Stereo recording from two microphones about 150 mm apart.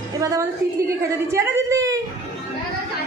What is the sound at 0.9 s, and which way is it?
A woman's voice, 20° right (ahead or behind).